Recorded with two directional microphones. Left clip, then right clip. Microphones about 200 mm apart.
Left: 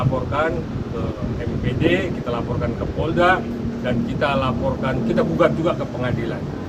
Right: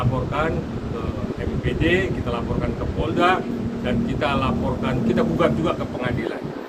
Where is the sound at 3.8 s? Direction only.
15° left (ahead or behind).